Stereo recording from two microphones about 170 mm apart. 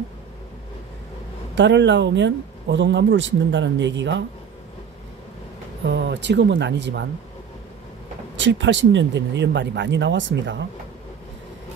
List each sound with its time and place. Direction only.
1.5 s speech: 90° right
5.9 s speech: 85° right
8.4 s speech: 90° right